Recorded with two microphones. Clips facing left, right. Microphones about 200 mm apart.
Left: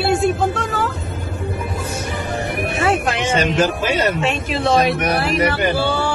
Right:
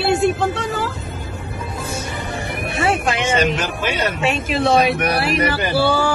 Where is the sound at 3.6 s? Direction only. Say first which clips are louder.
Left 5 dB; 40° left (ahead or behind).